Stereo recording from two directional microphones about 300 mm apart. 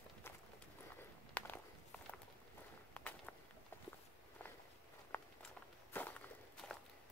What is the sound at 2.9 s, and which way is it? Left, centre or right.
Walk, centre.